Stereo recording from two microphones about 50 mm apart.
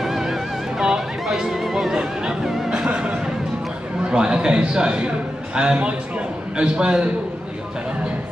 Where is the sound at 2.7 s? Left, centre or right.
Centre.